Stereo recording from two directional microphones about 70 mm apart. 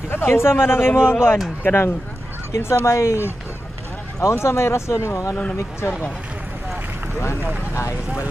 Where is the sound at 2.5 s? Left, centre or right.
Left.